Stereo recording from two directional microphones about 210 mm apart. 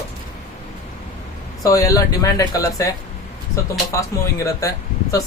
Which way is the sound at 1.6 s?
15° left (ahead or behind).